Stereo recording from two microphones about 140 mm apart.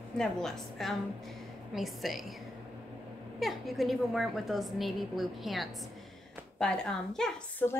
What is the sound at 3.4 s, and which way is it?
A woman's voice, centre (ahead or behind).